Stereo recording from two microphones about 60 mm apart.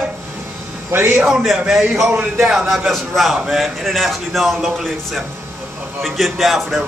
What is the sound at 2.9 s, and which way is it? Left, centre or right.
A man's voice, centre.